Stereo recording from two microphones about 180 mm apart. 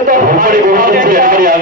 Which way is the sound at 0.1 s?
50° right (ahead or behind).